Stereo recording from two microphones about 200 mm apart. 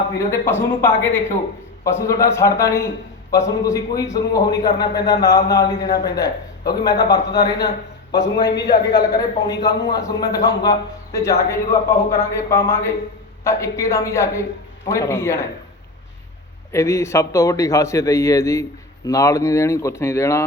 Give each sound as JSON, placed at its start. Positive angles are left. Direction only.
{"t": 0.2, "sound": "a man's voice", "side_deg": 15}
{"t": 9.0, "sound": "a man's voice", "side_deg": 20}
{"t": 16.7, "sound": "a man's voice", "side_deg": 15}